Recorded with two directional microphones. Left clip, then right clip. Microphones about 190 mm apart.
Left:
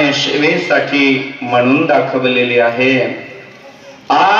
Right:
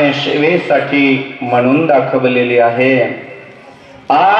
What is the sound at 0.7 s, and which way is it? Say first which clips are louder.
A man's voice: even; 25° right (ahead or behind).